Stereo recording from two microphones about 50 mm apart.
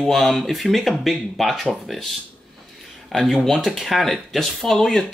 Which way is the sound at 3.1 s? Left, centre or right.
Centre.